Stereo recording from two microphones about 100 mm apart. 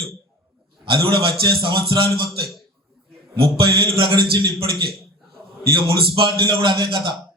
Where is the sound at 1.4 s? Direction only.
45° right (ahead or behind).